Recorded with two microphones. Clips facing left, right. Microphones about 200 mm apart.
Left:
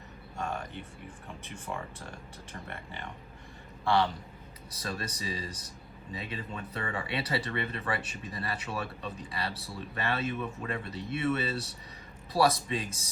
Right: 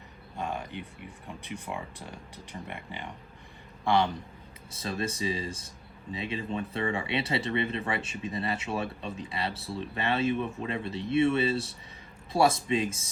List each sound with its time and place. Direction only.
0.3 s speech: 15° right (ahead or behind)